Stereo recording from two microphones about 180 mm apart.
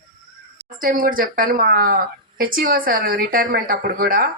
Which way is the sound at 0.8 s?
50° right (ahead or behind).